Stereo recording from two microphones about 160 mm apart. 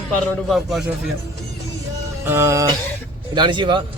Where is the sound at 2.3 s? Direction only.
15° right (ahead or behind).